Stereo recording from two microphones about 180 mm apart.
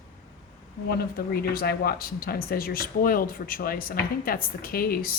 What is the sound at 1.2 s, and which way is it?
Speech, 55° left (ahead or behind).